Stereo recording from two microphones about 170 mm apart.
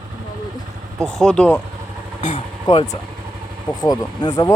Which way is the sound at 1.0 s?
5° left (ahead or behind).